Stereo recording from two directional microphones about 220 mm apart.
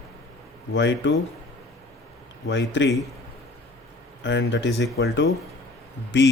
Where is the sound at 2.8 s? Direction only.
55° left (ahead or behind).